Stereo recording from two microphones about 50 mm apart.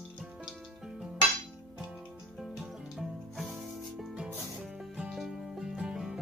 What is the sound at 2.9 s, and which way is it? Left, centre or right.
Music, centre.